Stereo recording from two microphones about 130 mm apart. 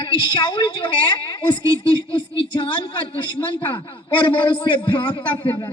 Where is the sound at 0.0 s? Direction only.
35° left (ahead or behind).